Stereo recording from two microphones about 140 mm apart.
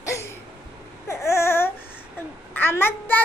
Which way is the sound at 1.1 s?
20° left (ahead or behind).